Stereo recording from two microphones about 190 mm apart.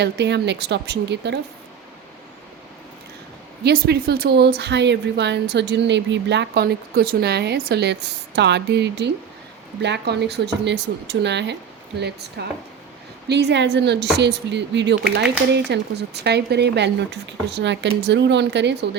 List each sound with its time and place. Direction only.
0.0 s speech: 65° right (ahead or behind)
3.6 s speech: 55° right (ahead or behind)